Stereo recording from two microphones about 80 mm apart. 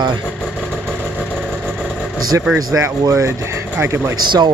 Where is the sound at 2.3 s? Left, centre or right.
Right.